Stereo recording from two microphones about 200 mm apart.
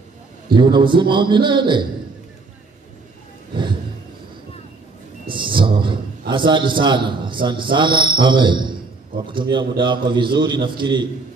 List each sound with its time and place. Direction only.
0.6 s a man's voice: 25° right (ahead or behind)
5.3 s a man's voice: 25° right (ahead or behind)